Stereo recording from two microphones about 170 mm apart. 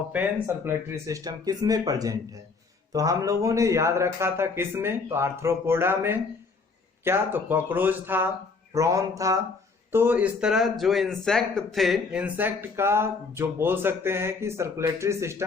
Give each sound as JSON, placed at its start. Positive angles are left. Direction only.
{"t": 0.1, "sound": "speech", "side_deg": -10}